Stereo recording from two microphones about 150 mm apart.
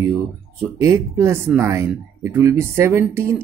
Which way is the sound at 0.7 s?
20° right (ahead or behind).